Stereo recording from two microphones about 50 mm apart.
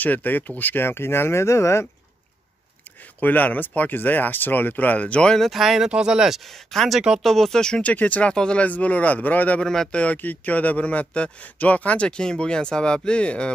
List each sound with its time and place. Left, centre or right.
0.0 s speech: left
3.2 s speech: left
5.4 s speech: centre
5.9 s speech: centre
7.2 s speech: centre
7.8 s a man's voice: left
8.6 s speech: left
9.6 s speech: centre
10.0 s a man's voice: left